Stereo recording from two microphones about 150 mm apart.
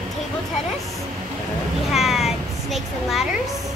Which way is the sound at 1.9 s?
Centre (ahead or behind).